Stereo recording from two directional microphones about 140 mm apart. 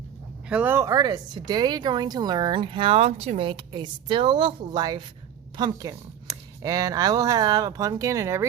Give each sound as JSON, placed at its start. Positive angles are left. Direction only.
{"t": 0.4, "sound": "speech", "side_deg": -10}